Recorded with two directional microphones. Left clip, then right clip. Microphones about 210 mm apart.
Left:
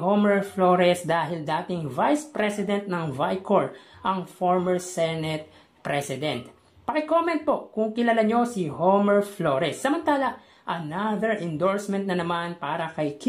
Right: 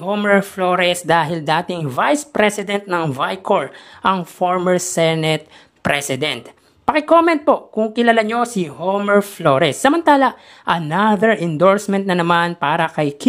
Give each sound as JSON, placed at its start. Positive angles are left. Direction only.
{"t": 0.1, "sound": "speech", "side_deg": -35}